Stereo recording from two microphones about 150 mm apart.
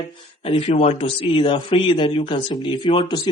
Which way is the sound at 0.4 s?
45° left (ahead or behind).